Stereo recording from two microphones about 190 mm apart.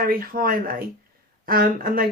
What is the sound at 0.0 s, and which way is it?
Speech, 50° right (ahead or behind).